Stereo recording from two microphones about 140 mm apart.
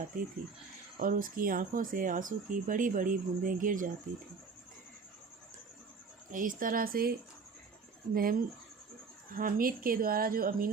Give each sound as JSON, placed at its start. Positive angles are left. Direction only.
{"t": 0.1, "sound": "speech", "side_deg": -75}
{"t": 6.3, "sound": "speech", "side_deg": -70}